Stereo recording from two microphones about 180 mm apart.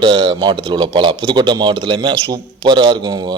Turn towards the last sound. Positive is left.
turn(degrees=-25)  # may be behind; listen again after turning